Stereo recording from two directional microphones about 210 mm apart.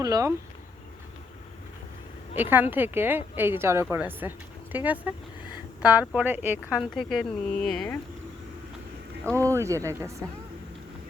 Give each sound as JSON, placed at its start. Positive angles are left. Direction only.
{"t": 0.0, "sound": "speech", "side_deg": -15}
{"t": 2.3, "sound": "speech", "side_deg": -10}
{"t": 9.3, "sound": "speech", "side_deg": -15}